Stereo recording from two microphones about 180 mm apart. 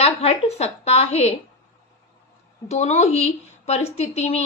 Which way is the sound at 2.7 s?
40° left (ahead or behind).